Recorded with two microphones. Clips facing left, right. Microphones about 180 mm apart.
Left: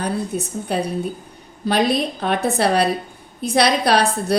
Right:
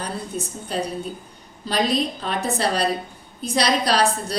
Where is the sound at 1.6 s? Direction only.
60° left (ahead or behind).